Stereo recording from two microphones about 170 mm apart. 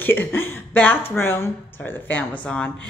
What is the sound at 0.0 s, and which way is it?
Speech, 10° left (ahead or behind).